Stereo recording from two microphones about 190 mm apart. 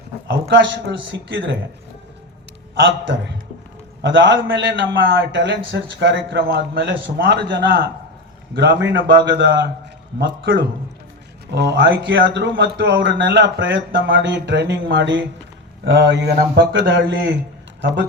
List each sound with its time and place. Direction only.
0.3 s speech: 75° right (ahead or behind)
4.0 s speech: 75° right (ahead or behind)